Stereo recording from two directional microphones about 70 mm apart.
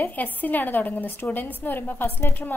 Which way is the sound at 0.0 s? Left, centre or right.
Left.